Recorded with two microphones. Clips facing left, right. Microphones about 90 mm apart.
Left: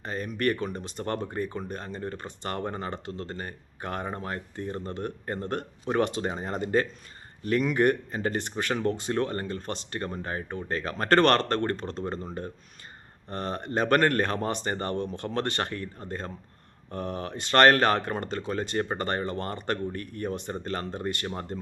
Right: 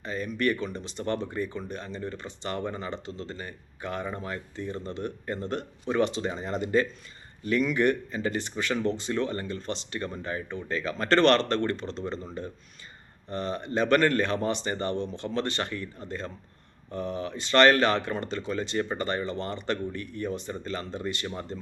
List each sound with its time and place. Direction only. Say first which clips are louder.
0.0 s speech: even; 50° left (ahead or behind)
16.9 s speech: right 1 dB; 55° left (ahead or behind)